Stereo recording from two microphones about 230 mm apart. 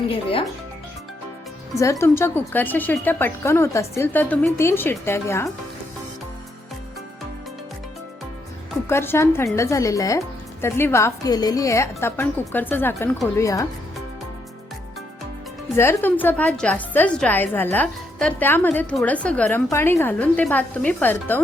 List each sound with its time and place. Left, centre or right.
0.1 s speech: left
1.8 s a woman's voice: centre
8.9 s a woman's voice: centre
15.7 s a woman's voice: centre